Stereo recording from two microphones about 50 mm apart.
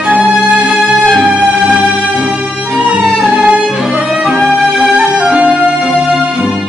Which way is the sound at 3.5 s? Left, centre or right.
Right.